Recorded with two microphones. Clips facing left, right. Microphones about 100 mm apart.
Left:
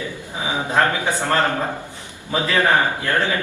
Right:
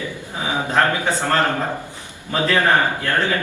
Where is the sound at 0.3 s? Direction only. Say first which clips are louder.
Even; 15° left (ahead or behind).